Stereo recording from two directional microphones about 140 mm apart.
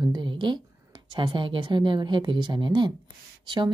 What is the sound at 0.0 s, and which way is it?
A woman's voice, 30° right (ahead or behind).